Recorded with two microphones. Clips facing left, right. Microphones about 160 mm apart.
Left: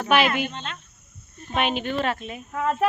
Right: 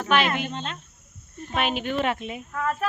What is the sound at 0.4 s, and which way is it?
Speech, 35° right (ahead or behind).